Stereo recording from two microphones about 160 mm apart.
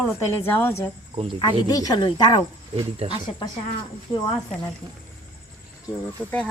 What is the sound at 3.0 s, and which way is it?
Speech, 40° right (ahead or behind).